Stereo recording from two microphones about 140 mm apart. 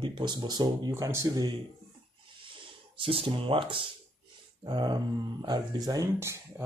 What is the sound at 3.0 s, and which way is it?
Speech, 40° right (ahead or behind).